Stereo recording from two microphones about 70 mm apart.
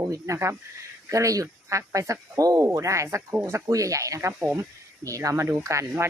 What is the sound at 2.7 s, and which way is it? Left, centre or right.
Speech, right.